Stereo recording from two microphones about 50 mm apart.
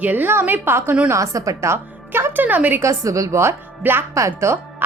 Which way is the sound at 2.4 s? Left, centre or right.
Right.